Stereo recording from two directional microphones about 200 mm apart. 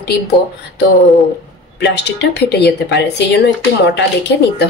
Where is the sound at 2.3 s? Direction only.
55° left (ahead or behind).